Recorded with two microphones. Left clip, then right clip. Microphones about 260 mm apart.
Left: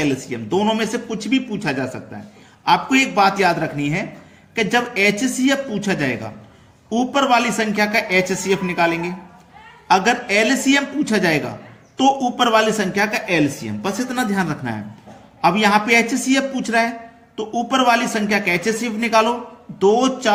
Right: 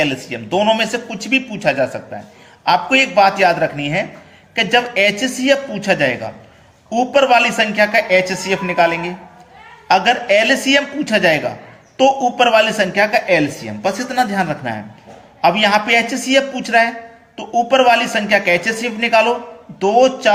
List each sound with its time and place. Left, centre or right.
0.0 s a man's voice: centre